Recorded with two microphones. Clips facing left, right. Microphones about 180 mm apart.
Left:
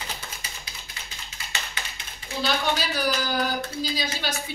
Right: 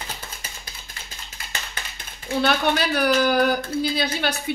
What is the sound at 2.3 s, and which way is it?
A woman's voice, 60° right (ahead or behind).